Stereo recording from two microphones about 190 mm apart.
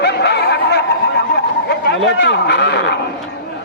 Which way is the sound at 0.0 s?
60° left (ahead or behind).